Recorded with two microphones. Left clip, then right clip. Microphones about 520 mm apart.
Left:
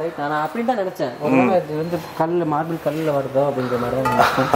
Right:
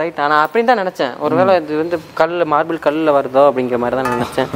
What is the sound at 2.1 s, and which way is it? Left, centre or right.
Mantra, right.